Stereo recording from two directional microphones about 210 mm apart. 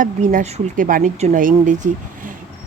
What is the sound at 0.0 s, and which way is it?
Speech, 40° right (ahead or behind).